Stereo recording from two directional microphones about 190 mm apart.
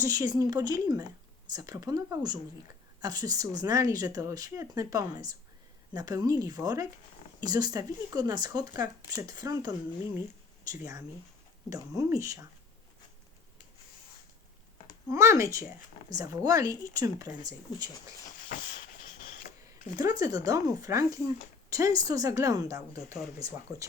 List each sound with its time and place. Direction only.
0.0 s a woman's voice: 20° right (ahead or behind)
15.1 s a woman's voice: 15° right (ahead or behind)
19.4 s a sound: 45° left (ahead or behind)
20.0 s a woman's voice: 20° right (ahead or behind)